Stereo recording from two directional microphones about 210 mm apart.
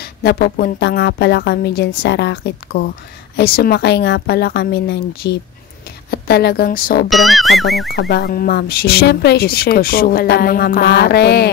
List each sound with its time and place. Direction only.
0.0 s speech: 45° left (ahead or behind)
7.1 s music: centre (ahead or behind)
7.9 s speech: 50° left (ahead or behind)